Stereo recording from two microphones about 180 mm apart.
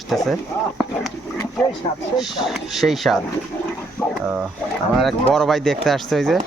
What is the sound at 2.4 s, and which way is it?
Speech, centre (ahead or behind).